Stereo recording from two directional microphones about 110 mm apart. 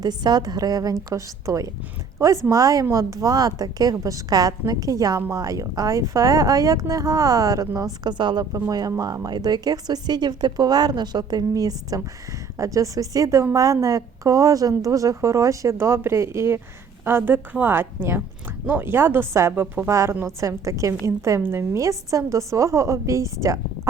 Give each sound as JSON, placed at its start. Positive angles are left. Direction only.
{"t": 0.0, "sound": "a woman's voice", "side_deg": -40}
{"t": 8.0, "sound": "a woman's voice", "side_deg": -40}